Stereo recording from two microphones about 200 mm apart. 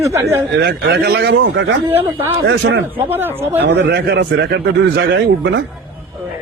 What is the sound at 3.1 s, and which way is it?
Speech, 10° right (ahead or behind).